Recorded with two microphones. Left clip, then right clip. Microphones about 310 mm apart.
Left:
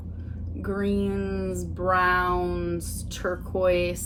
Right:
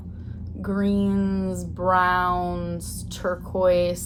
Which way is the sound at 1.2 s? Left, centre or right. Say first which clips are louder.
Right 2 dB; right.